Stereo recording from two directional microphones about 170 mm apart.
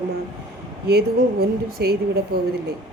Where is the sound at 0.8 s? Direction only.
70° right (ahead or behind).